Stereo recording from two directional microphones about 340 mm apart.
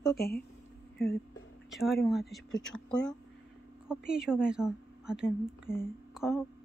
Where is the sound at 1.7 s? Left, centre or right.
Centre.